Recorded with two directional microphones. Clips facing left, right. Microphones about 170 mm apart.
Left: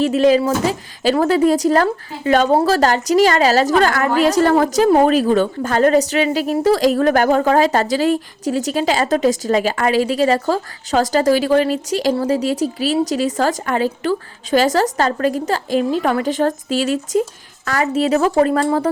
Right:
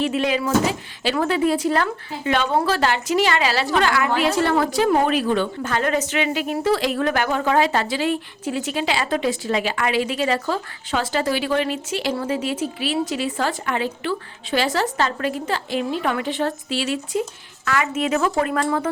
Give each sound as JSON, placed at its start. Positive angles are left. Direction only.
{"t": 0.0, "sound": "a woman's voice", "side_deg": 40}